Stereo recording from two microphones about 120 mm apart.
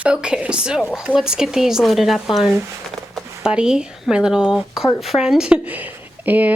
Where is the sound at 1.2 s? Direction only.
5° right (ahead or behind).